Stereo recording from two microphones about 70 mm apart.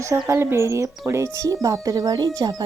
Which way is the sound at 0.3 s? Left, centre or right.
Right.